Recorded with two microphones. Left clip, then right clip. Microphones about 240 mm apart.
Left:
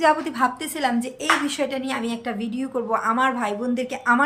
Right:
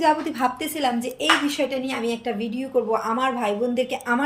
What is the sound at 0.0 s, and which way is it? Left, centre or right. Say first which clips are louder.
A woman's voice: left 1 dB; centre.